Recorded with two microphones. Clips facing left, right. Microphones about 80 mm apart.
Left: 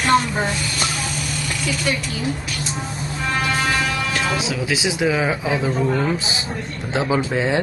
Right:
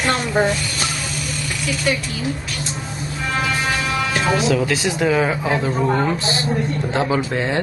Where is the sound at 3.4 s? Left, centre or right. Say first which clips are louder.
Even; centre.